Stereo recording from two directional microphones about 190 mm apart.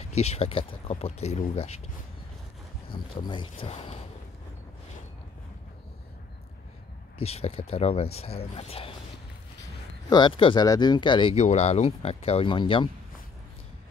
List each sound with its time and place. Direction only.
0.0 s speech: 35° left (ahead or behind)
2.9 s speech: 25° left (ahead or behind)
7.2 s speech: 30° left (ahead or behind)
10.0 s speech: 25° left (ahead or behind)
11.3 s speech: 35° left (ahead or behind)